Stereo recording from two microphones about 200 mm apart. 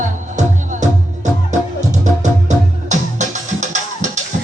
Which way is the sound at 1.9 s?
35° right (ahead or behind).